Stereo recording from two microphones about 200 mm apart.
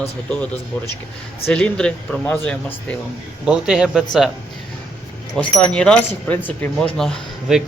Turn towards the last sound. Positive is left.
turn(degrees=5)  # may be behind; listen again after turning